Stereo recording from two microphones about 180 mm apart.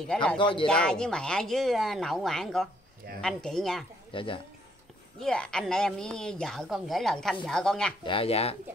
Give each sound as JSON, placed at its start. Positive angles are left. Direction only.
{"t": 0.1, "sound": "a woman's voice", "side_deg": 5}
{"t": 0.4, "sound": "speech", "side_deg": 25}
{"t": 0.7, "sound": "a woman's voice", "side_deg": 5}
{"t": 4.1, "sound": "speech", "side_deg": 30}
{"t": 5.2, "sound": "a woman's voice", "side_deg": 5}
{"t": 8.0, "sound": "speech", "side_deg": 30}